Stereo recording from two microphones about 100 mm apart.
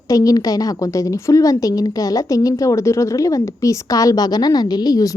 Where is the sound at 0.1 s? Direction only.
35° left (ahead or behind).